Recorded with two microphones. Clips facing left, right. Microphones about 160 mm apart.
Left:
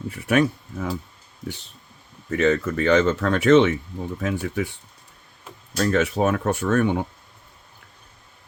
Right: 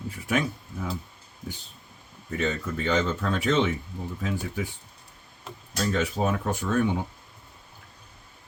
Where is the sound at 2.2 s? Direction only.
75° left (ahead or behind).